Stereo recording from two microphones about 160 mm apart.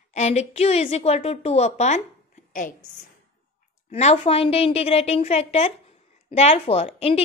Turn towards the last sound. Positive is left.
turn(degrees=40)  # may be behind; listen again after turning